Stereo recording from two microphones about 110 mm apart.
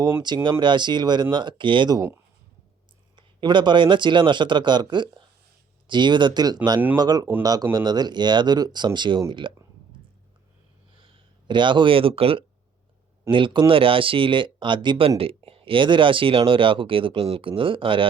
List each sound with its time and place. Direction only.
0.3 s speech: 40° right (ahead or behind)
3.2 s speech: 45° right (ahead or behind)
11.0 s speech: 45° right (ahead or behind)